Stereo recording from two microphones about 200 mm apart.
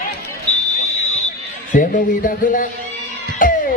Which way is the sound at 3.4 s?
40° left (ahead or behind).